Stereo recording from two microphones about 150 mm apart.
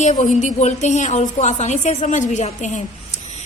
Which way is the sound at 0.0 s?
50° left (ahead or behind).